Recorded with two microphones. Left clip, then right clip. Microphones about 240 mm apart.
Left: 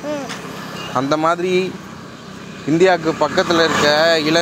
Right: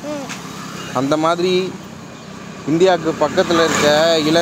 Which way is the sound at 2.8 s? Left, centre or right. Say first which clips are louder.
Even; centre.